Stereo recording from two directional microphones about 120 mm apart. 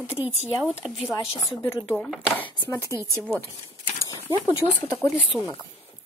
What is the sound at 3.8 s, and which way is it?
Dog, 30° left (ahead or behind).